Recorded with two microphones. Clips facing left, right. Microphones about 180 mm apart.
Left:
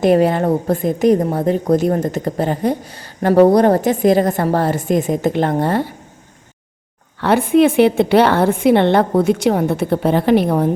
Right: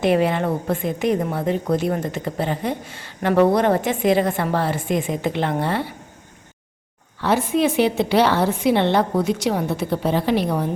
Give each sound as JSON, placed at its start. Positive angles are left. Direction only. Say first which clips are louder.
{"t": 0.0, "sound": "a woman's voice", "louder": "left 5 dB", "side_deg": 40}
{"t": 7.2, "sound": "a woman's voice", "louder": "left 7 dB", "side_deg": 60}